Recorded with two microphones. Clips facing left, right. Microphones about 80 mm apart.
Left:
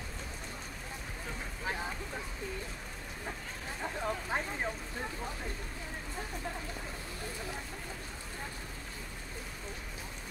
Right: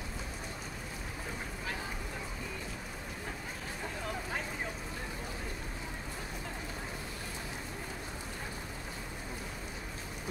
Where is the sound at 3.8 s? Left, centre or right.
Left.